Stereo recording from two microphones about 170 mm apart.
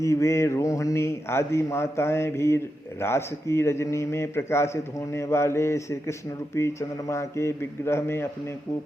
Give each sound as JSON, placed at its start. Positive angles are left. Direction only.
{"t": 0.0, "sound": "a man's voice", "side_deg": 15}